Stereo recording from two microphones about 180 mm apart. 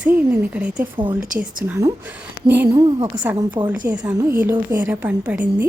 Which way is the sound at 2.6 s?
25° right (ahead or behind).